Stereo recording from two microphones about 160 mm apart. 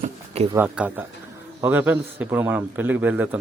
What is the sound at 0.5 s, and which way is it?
A man's voice, 10° right (ahead or behind).